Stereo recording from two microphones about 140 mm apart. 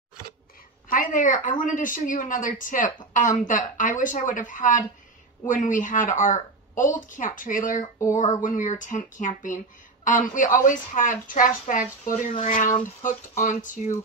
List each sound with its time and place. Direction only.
0.8 s a woman's voice: 70° left (ahead or behind)
8.1 s a woman's voice: 60° left (ahead or behind)